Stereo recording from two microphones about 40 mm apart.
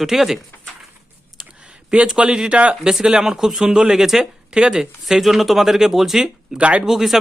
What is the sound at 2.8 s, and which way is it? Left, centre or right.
Speech, centre.